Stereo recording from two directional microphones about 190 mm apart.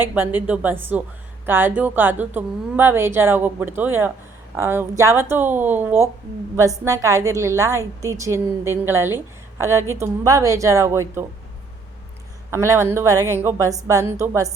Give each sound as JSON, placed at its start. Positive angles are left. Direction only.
{"t": 0.0, "sound": "a woman's voice", "side_deg": -10}
{"t": 12.5, "sound": "a woman's voice", "side_deg": -15}